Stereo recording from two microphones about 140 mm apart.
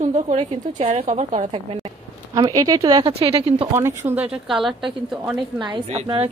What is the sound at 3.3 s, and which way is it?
Speech, 45° right (ahead or behind).